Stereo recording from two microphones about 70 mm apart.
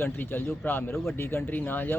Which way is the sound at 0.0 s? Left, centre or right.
Left.